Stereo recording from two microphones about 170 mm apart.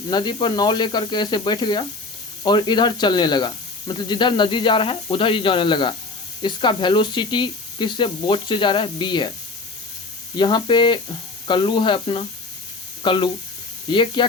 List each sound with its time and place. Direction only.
0.1 s speech: 25° left (ahead or behind)
10.3 s speech: 25° left (ahead or behind)